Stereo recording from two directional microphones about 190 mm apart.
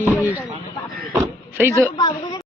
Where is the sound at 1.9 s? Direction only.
25° left (ahead or behind).